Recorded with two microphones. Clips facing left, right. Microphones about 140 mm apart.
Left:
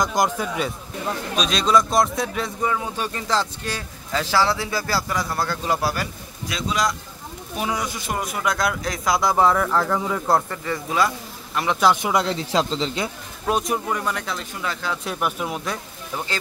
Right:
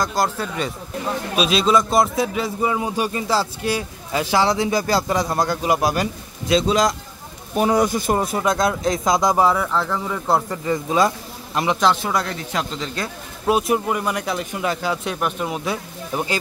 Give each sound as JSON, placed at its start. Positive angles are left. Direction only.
{"t": 0.0, "sound": "speech", "side_deg": 15}
{"t": 1.3, "sound": "a man's voice", "side_deg": -5}
{"t": 2.6, "sound": "a man's voice", "side_deg": -15}
{"t": 7.5, "sound": "a man's voice", "side_deg": -50}
{"t": 8.1, "sound": "speech", "side_deg": -30}
{"t": 9.5, "sound": "a man's voice", "side_deg": -5}
{"t": 9.8, "sound": "speech", "side_deg": 10}
{"t": 10.5, "sound": "speech", "side_deg": -20}
{"t": 11.8, "sound": "speech", "side_deg": 15}
{"t": 13.5, "sound": "a man's voice", "side_deg": -5}
{"t": 15.0, "sound": "a man's voice", "side_deg": 5}
{"t": 16.1, "sound": "a man's voice", "side_deg": -15}